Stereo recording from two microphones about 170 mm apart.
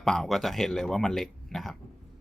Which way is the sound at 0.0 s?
5° left (ahead or behind).